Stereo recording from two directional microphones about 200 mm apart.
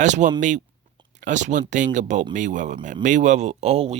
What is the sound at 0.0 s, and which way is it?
Speech, 40° right (ahead or behind).